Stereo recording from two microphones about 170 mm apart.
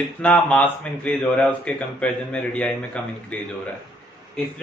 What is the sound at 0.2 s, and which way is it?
Speech, 5° left (ahead or behind).